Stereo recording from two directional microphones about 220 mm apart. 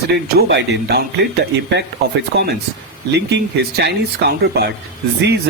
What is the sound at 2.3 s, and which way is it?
Speech, 50° right (ahead or behind).